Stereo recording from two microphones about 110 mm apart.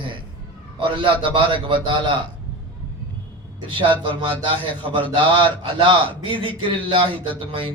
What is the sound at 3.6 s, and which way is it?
A man's voice, 50° right (ahead or behind).